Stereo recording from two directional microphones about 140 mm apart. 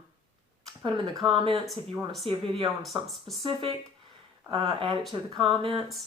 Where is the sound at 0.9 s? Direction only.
35° right (ahead or behind).